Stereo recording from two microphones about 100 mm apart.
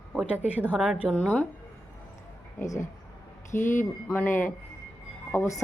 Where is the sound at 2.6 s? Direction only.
35° left (ahead or behind).